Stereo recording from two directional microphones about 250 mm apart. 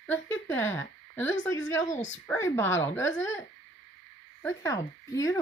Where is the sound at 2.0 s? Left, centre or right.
Left.